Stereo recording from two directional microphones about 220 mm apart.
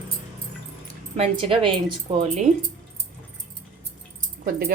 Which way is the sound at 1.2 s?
25° right (ahead or behind).